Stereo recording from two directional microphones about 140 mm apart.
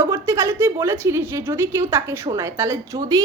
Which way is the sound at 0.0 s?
20° right (ahead or behind).